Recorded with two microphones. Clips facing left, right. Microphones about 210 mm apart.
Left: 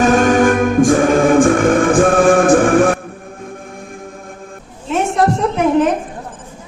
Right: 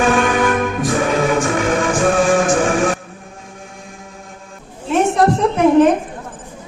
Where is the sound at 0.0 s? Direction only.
40° left (ahead or behind).